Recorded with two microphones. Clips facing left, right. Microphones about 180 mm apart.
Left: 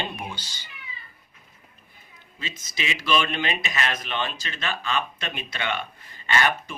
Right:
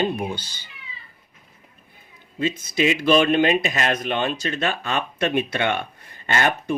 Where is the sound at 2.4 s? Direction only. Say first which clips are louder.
Right 12 dB; 55° right (ahead or behind).